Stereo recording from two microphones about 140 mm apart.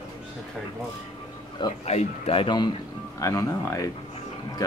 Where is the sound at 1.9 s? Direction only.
50° left (ahead or behind).